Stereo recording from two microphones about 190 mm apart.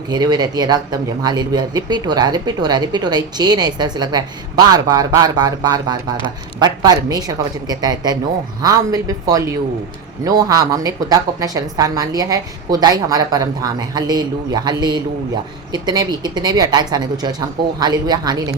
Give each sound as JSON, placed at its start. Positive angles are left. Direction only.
{"t": 0.1, "sound": "speech", "side_deg": -20}